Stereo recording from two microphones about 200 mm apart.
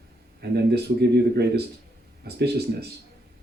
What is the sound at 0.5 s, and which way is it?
Speech, 55° right (ahead or behind).